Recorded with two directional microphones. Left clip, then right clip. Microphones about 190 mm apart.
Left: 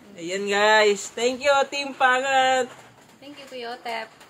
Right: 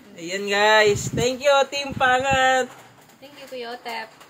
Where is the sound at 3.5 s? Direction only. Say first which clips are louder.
Even; 20° left (ahead or behind).